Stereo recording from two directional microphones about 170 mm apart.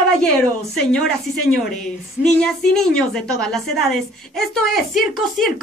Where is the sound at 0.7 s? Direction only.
5° left (ahead or behind).